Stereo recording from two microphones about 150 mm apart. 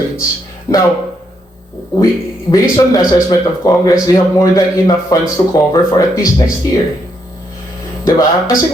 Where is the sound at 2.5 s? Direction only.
25° left (ahead or behind).